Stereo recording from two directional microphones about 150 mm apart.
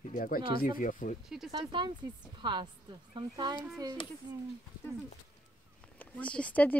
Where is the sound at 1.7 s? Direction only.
35° right (ahead or behind).